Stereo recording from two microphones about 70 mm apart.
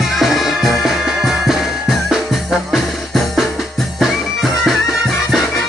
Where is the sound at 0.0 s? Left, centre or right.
Centre.